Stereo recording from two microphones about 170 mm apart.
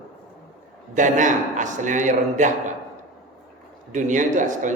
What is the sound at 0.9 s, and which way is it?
A man's voice, 45° right (ahead or behind).